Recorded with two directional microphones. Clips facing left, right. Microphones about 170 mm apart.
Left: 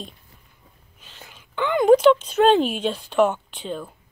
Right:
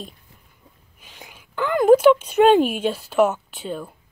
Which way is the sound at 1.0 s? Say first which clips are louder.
Right 2 dB; 10° right (ahead or behind).